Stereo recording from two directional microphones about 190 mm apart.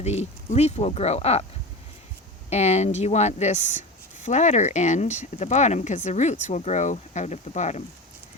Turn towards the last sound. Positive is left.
turn(degrees=35)  # may be behind; listen again after turning